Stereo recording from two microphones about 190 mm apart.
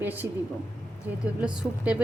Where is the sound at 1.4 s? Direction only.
5° right (ahead or behind).